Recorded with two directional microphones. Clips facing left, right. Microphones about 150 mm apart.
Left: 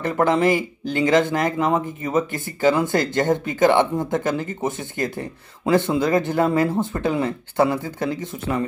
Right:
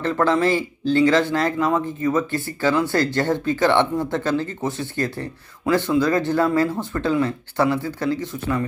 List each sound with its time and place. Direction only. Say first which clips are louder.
0.0 s speech: left 1 dB; 20° left (ahead or behind)